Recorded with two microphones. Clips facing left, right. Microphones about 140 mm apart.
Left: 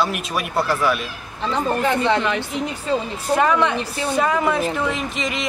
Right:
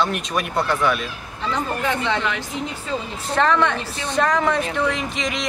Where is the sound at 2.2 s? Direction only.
30° left (ahead or behind).